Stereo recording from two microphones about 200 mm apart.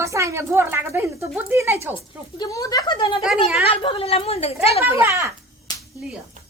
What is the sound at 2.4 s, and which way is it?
A woman's voice, 15° left (ahead or behind).